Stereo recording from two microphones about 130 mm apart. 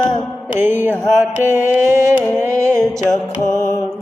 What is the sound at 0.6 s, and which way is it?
Music, 15° right (ahead or behind).